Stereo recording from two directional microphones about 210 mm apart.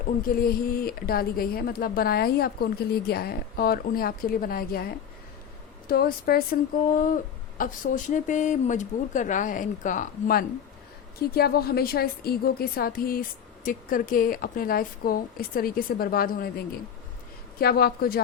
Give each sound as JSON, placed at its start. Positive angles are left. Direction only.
{"t": 0.2, "sound": "a woman's voice", "side_deg": 45}
{"t": 5.9, "sound": "a woman's voice", "side_deg": 45}